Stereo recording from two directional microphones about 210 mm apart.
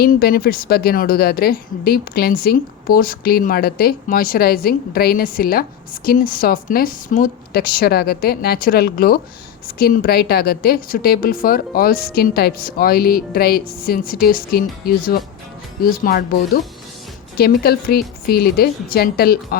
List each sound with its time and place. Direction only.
0.0 s a woman's voice: 45° left (ahead or behind)
17.3 s a woman's voice: 50° left (ahead or behind)